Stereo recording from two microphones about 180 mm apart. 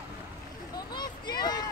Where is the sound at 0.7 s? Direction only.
25° left (ahead or behind).